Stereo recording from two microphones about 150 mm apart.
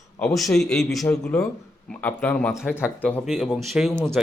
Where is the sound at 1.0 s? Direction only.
10° left (ahead or behind).